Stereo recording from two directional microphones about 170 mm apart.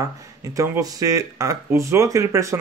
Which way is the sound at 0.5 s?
20° right (ahead or behind).